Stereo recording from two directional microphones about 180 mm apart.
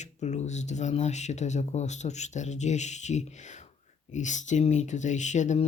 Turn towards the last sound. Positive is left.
turn(degrees=40)  # may be behind; listen again after turning